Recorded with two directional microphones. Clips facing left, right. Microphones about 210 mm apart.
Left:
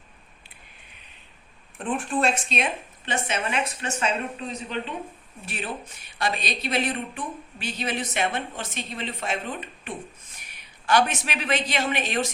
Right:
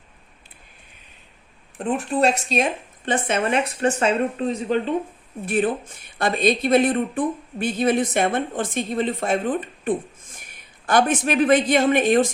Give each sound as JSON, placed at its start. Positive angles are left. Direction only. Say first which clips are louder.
{"t": 1.8, "sound": "speech", "louder": "right 5 dB", "side_deg": -40}
{"t": 3.1, "sound": "a woman's voice", "louder": "right 7 dB", "side_deg": -55}